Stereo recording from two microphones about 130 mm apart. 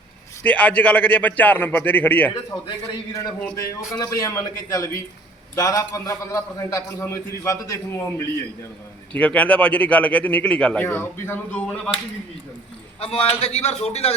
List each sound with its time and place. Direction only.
0.4 s speech: 10° left (ahead or behind)
2.3 s a man's voice: 30° left (ahead or behind)
9.1 s speech: 10° left (ahead or behind)
13.0 s a man's voice: 45° left (ahead or behind)